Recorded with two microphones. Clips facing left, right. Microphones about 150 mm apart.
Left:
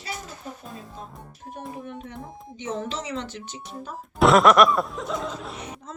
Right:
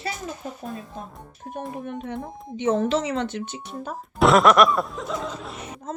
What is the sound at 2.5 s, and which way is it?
Speech, 60° right (ahead or behind).